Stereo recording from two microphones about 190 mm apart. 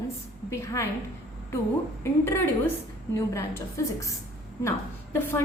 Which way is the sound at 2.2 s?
10° left (ahead or behind).